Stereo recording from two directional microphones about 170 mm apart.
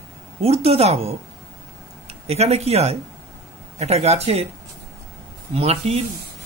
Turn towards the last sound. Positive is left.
turn(degrees=-35)  # may be behind; listen again after turning